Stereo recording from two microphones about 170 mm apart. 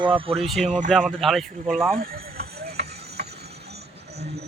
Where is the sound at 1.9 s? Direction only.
60° right (ahead or behind).